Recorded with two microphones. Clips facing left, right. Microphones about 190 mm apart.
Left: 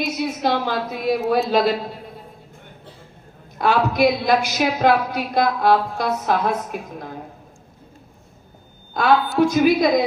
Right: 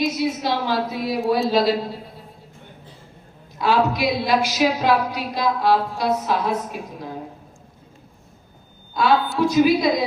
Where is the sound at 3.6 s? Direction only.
50° left (ahead or behind).